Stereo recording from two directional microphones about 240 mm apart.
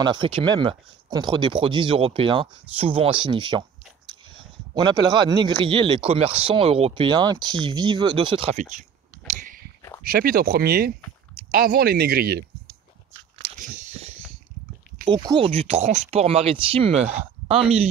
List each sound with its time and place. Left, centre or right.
0.0 s speech: centre
4.8 s speech: centre
9.3 s a sound: right
10.0 s speech: right
13.4 s biting: right
15.0 s speech: centre